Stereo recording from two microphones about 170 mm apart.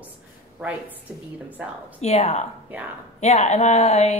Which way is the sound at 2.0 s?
40° left (ahead or behind).